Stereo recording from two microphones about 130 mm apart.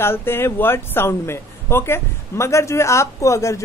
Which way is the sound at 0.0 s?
20° left (ahead or behind).